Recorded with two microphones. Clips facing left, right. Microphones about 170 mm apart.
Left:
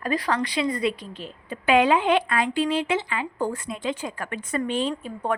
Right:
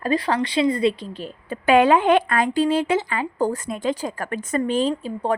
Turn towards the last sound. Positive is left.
turn(degrees=-30)  # may be behind; listen again after turning